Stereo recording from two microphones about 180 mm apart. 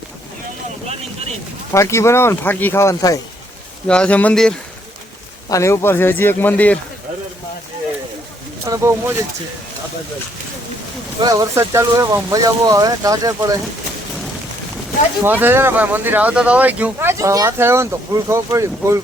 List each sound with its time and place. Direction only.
1.7 s speech: 15° left (ahead or behind)
3.8 s speech: 5° left (ahead or behind)
5.5 s speech: 15° left (ahead or behind)
8.6 s speech: 15° right (ahead or behind)
11.2 s speech: 20° right (ahead or behind)
15.2 s speech: 10° right (ahead or behind)